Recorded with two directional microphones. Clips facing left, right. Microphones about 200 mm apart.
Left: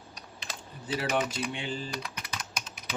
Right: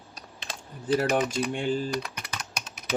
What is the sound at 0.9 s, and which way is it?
Speech, 50° right (ahead or behind).